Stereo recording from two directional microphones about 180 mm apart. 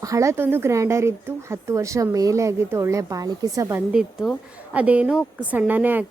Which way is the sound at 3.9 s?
5° right (ahead or behind).